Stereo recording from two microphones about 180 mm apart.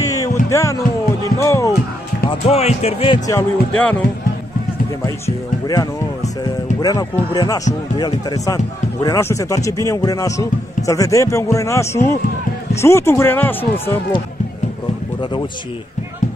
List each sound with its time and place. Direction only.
0.0 s music: 20° left (ahead or behind)
2.4 s speech: 35° left (ahead or behind)
3.3 s a man's voice: 10° left (ahead or behind)
5.0 s a man's voice: 20° left (ahead or behind)